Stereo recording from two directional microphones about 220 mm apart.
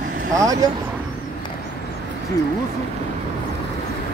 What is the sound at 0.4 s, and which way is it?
Speech, 15° right (ahead or behind).